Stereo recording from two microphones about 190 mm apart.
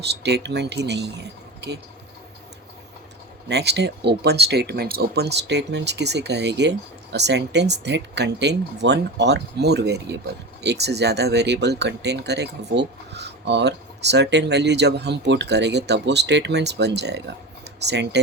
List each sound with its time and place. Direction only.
0.0 s speech: 60° right (ahead or behind)
3.5 s speech: 60° right (ahead or behind)